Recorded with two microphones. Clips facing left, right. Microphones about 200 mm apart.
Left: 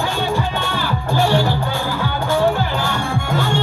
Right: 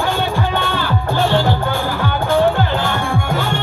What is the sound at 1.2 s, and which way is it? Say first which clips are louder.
Music: even; 20° right (ahead or behind).